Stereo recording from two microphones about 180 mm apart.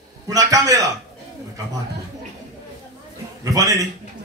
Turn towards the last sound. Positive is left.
turn(degrees=-20)  # may be behind; listen again after turning